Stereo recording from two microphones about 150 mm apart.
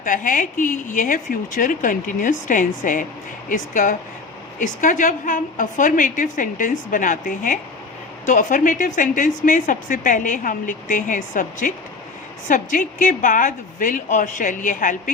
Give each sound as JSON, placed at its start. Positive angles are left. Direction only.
{"t": 0.0, "sound": "speech", "side_deg": 65}